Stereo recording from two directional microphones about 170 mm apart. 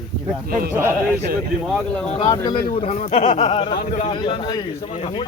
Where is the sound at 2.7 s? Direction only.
35° left (ahead or behind).